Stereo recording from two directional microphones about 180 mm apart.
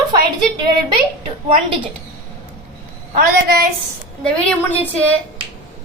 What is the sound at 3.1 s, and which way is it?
Speech, 55° right (ahead or behind).